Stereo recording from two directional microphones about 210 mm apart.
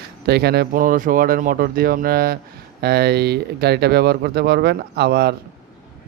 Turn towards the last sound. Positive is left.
turn(degrees=-50)  # may be behind; listen again after turning